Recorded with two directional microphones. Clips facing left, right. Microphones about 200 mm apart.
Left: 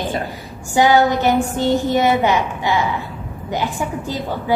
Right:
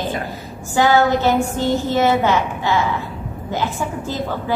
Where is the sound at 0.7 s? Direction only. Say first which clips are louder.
Left 1 dB; 15° left (ahead or behind).